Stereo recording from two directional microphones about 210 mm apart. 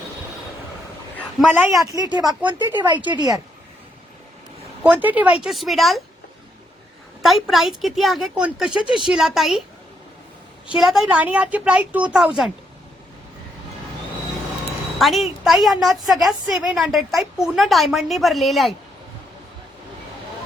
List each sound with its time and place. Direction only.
1.4 s a woman's voice: centre (ahead or behind)
1.8 s speech: 15° right (ahead or behind)
3.1 s speech: 20° right (ahead or behind)
4.8 s a woman's voice: 5° right (ahead or behind)
7.2 s a woman's voice: centre (ahead or behind)
10.7 s a woman's voice: centre (ahead or behind)
14.9 s a woman's voice: centre (ahead or behind)